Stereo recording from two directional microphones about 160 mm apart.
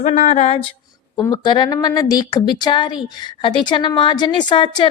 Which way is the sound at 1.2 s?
25° left (ahead or behind).